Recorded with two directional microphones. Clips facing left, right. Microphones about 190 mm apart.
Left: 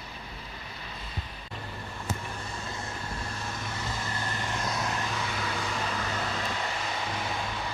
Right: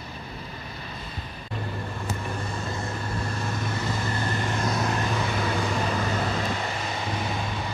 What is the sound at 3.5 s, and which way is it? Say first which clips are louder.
Vehicle: right 6 dB; 60° right (ahead or behind).